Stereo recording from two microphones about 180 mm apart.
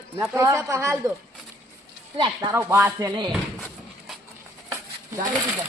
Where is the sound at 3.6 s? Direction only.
Centre (ahead or behind).